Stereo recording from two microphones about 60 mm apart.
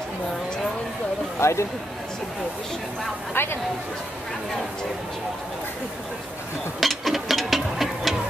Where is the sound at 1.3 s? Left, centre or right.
Left.